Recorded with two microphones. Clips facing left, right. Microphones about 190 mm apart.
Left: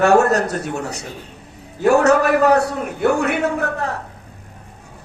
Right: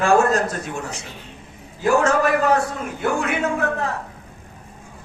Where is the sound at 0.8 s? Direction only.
40° left (ahead or behind).